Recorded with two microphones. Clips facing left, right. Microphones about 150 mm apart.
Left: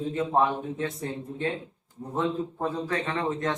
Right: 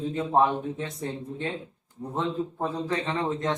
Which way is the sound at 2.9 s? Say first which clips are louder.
Right 1 dB; 25° right (ahead or behind).